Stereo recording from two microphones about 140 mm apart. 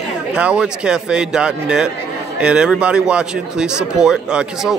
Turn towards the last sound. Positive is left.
turn(degrees=-5)  # may be behind; listen again after turning